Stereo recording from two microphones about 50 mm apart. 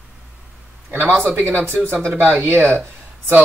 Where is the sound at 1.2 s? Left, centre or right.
Right.